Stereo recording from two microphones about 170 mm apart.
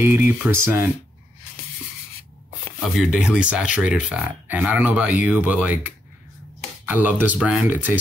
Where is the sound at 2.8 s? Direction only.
5° right (ahead or behind).